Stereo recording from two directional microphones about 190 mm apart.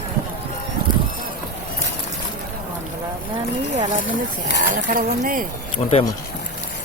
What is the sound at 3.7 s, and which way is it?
Speech, 40° right (ahead or behind).